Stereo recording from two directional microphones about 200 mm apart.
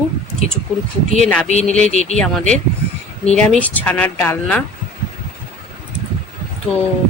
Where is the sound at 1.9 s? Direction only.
35° left (ahead or behind).